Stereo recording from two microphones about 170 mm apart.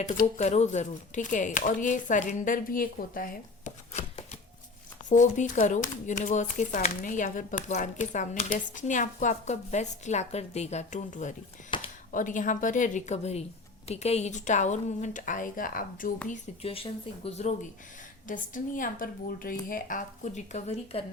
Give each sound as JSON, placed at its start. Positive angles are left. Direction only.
{"t": 0.0, "sound": "speech", "side_deg": 50}
{"t": 5.0, "sound": "speech", "side_deg": 45}
{"t": 11.7, "sound": "a sound", "side_deg": 30}
{"t": 12.1, "sound": "speech", "side_deg": 50}
{"t": 16.3, "sound": "speech", "side_deg": 35}
{"t": 18.3, "sound": "speech", "side_deg": 50}